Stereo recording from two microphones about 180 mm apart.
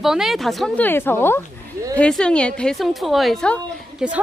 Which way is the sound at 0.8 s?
10° left (ahead or behind).